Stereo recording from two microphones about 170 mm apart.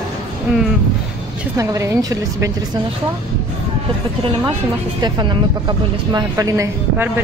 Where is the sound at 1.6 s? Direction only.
20° right (ahead or behind).